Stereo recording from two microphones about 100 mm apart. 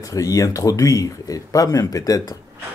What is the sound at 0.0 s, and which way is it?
Speech, 35° left (ahead or behind).